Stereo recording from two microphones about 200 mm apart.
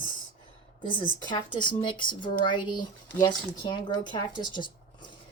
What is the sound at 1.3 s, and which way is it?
Speech, 25° left (ahead or behind).